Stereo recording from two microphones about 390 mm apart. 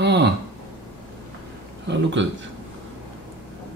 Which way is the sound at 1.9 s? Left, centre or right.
Right.